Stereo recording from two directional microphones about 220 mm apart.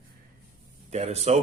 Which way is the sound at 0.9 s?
30° right (ahead or behind).